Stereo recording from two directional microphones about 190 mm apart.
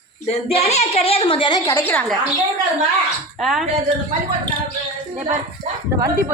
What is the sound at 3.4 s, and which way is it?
Speech, centre (ahead or behind).